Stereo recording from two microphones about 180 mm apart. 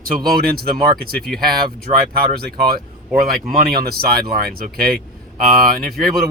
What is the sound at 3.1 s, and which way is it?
Speech, 55° right (ahead or behind).